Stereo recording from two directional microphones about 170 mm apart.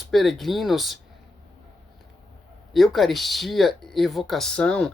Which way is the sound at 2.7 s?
Centre (ahead or behind).